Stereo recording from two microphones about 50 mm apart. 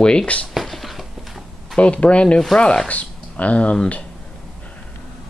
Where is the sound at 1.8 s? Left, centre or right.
Left.